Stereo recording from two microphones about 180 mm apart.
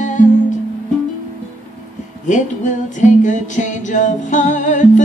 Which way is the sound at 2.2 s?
45° left (ahead or behind).